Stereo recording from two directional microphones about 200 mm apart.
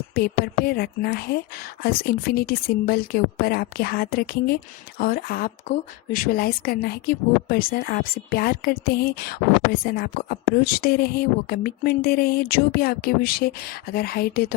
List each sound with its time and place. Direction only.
0.1 s speech: 50° left (ahead or behind)